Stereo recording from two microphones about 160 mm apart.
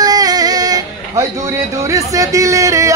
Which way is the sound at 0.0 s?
25° right (ahead or behind).